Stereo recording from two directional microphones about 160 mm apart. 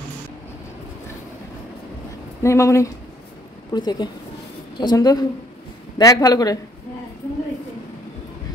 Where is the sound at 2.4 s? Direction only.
20° left (ahead or behind).